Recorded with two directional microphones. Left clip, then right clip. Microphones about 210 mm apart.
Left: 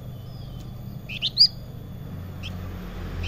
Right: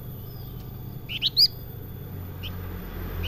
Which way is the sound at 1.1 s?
20° right (ahead or behind).